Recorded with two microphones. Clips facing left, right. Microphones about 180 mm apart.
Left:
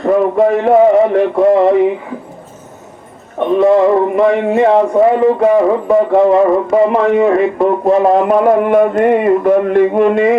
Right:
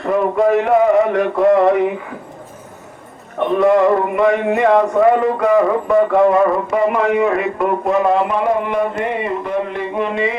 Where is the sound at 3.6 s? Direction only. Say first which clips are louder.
Left 3 dB; 30° left (ahead or behind).